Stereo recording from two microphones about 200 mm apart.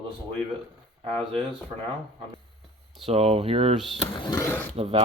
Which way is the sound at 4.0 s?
25° left (ahead or behind).